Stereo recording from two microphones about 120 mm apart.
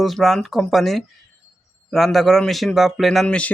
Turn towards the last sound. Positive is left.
turn(degrees=10)  # may be behind; listen again after turning